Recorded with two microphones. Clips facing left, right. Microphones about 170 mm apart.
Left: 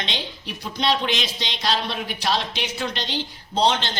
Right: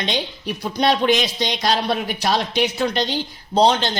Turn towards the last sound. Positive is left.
turn(degrees=-40)  # may be behind; listen again after turning